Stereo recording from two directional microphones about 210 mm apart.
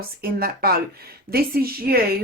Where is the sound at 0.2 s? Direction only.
45° right (ahead or behind).